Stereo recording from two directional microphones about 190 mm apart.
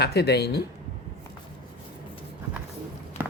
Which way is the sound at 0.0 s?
60° left (ahead or behind).